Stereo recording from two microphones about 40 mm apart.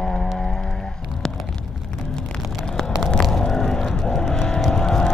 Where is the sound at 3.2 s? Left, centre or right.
Centre.